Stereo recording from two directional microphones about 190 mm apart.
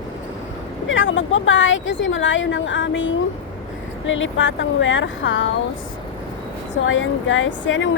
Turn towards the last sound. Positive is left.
turn(degrees=80)